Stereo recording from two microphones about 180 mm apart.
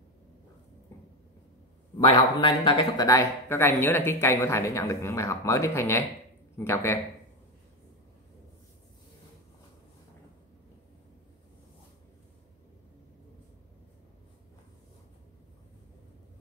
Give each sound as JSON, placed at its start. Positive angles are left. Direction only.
{"t": 2.0, "sound": "speech", "side_deg": 25}